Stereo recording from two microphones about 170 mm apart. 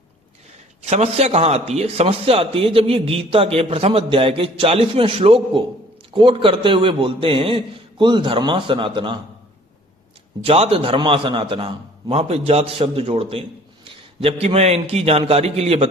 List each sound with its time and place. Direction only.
0.8 s a man's voice: 40° right (ahead or behind)
10.4 s a man's voice: 35° right (ahead or behind)
14.4 s a man's voice: 35° right (ahead or behind)